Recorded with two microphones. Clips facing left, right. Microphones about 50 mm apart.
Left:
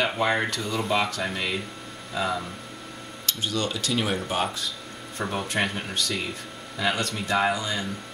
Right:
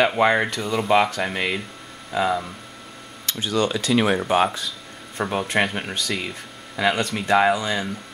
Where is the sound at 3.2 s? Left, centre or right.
Right.